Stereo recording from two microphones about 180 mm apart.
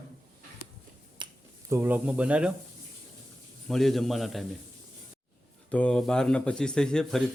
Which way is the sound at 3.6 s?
Centre (ahead or behind).